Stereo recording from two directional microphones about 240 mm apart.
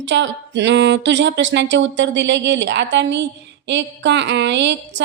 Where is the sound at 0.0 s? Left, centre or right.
Right.